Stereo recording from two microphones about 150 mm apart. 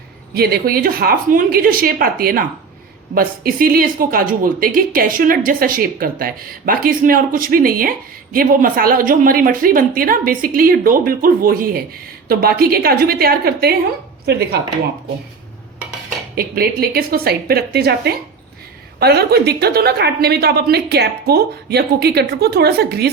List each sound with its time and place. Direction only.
0.3 s a woman's voice: 90° right; by 11.8 s 75° right (ahead or behind)
12.3 s a woman's voice: 90° right
16.3 s a woman's voice: 85° right